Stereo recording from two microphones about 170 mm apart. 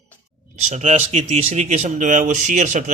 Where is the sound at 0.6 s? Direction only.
45° right (ahead or behind).